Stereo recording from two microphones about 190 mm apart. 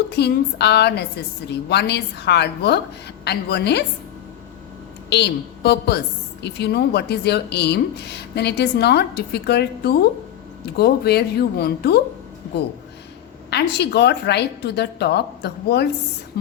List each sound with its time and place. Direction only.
0.1 s speech: 60° left (ahead or behind)
5.0 s a woman's voice: 60° left (ahead or behind)
13.5 s speech: 60° left (ahead or behind)